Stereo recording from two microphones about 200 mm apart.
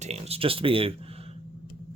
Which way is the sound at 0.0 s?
30° right (ahead or behind).